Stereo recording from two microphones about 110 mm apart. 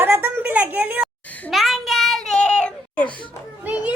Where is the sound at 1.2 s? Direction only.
15° left (ahead or behind).